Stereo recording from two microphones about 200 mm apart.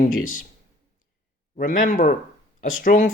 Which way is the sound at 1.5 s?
40° left (ahead or behind).